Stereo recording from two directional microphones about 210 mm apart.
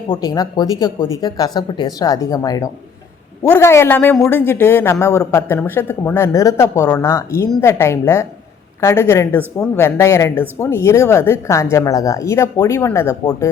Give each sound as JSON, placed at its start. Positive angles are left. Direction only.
{"t": 0.1, "sound": "a woman's voice", "side_deg": 20}